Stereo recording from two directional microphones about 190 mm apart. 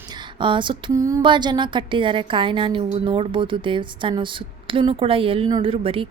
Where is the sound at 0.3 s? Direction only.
25° right (ahead or behind).